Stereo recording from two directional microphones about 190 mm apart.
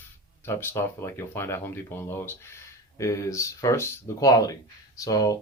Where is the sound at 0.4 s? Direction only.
15° left (ahead or behind).